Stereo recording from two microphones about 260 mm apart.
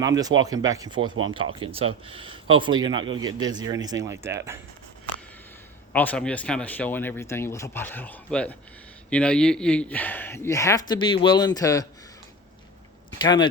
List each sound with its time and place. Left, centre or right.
0.0 s speech: centre
5.9 s speech: centre
13.2 s speech: centre